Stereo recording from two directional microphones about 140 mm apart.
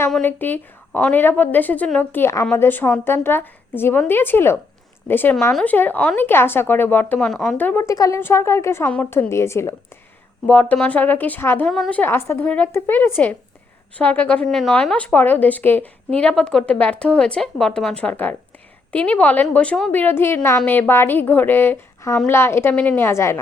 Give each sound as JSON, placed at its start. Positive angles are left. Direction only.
{"t": 0.1, "sound": "a woman's voice", "side_deg": 15}